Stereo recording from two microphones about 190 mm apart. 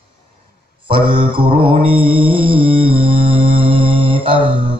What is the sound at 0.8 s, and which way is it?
Mantra, 25° right (ahead or behind).